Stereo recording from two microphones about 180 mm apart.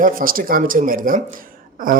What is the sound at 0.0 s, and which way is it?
Speech, 50° right (ahead or behind).